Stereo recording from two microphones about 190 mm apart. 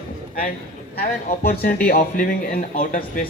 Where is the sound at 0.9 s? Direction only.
50° left (ahead or behind).